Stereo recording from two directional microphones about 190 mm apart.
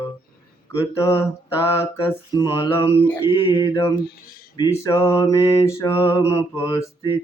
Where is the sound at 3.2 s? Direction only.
25° left (ahead or behind).